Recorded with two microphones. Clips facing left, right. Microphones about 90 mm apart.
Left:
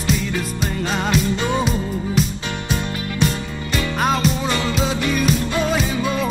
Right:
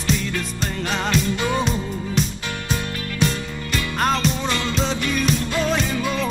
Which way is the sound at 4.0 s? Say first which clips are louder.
Left 1 dB; 5° left (ahead or behind).